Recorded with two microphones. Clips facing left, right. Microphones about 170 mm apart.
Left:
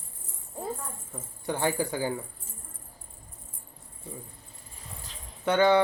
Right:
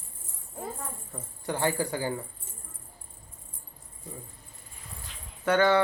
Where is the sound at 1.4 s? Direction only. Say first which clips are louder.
Even; 15° left (ahead or behind).